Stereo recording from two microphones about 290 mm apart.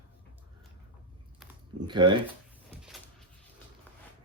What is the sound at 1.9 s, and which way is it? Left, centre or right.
Speech, centre.